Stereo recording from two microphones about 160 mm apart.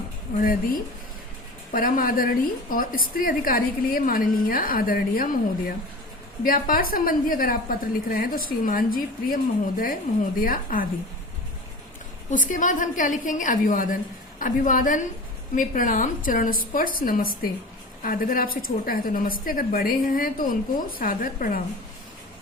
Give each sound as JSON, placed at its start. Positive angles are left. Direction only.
{"t": 1.7, "sound": "a woman's voice", "side_deg": 60}
{"t": 12.3, "sound": "a woman's voice", "side_deg": 55}